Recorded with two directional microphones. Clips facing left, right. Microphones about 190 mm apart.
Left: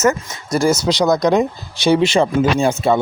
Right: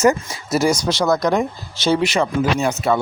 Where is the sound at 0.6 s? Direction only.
5° left (ahead or behind).